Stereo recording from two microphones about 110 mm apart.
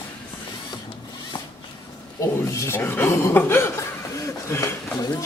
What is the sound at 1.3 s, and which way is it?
Zipper, 45° left (ahead or behind).